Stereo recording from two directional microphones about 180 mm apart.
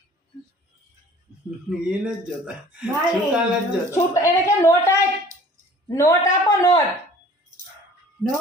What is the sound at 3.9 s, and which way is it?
Speech, 15° left (ahead or behind).